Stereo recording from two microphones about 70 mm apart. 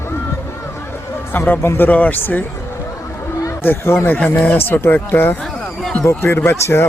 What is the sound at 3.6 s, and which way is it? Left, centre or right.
A man's voice, left.